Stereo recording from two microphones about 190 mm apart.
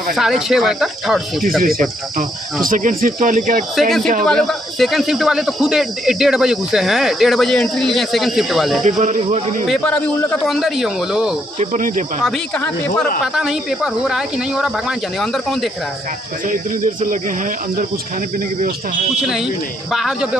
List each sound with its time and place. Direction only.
0.1 s speech: centre (ahead or behind)
2.1 s speech: 45° right (ahead or behind)
4.2 s speech: centre (ahead or behind)
8.8 s speech: 40° right (ahead or behind)
9.7 s speech: 5° left (ahead or behind)
11.7 s speech: 45° right (ahead or behind)
12.2 s speech: 5° left (ahead or behind)
13.2 s speech: centre (ahead or behind)
16.4 s speech: 45° right (ahead or behind)
19.2 s speech: centre (ahead or behind)